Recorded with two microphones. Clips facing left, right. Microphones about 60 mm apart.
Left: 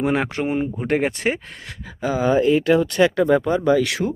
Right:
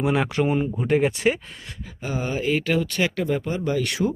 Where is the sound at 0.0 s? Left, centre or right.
Left.